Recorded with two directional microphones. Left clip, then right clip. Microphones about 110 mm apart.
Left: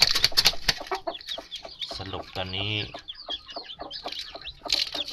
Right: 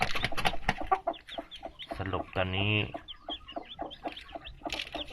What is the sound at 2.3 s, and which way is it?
Speech, 15° left (ahead or behind).